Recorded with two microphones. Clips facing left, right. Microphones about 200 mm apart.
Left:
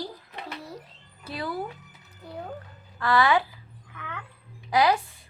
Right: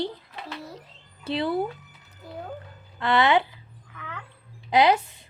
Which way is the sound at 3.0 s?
25° right (ahead or behind).